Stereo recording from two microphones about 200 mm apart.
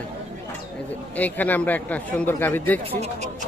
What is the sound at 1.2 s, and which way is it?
Speech, 10° left (ahead or behind).